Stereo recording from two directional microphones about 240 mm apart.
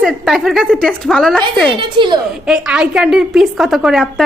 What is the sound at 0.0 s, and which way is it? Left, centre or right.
A woman's voice, centre.